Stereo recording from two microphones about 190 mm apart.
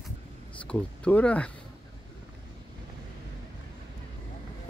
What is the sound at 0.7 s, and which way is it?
Speech, 5° left (ahead or behind).